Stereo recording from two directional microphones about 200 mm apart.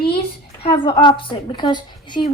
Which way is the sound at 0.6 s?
25° left (ahead or behind).